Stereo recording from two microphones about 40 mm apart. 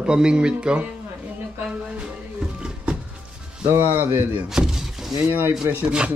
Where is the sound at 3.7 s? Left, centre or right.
Right.